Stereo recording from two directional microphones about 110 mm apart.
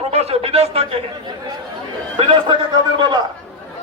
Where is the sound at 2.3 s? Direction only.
45° right (ahead or behind).